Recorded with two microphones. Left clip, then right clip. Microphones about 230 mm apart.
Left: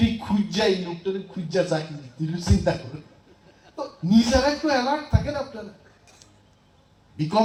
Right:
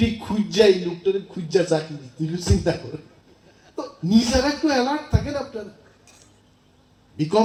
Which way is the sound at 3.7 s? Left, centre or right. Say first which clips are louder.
Even; right.